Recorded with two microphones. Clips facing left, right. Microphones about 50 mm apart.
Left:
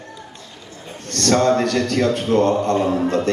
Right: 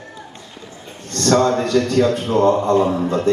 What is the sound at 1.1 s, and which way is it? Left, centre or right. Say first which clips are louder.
Speech: right 1 dB; left.